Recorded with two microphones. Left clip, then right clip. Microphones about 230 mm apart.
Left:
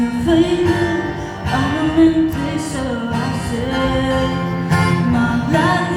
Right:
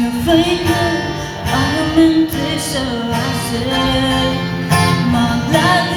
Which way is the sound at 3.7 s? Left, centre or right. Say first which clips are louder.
Right 2 dB; right.